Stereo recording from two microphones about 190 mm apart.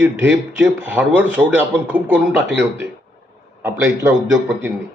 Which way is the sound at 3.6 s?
10° right (ahead or behind).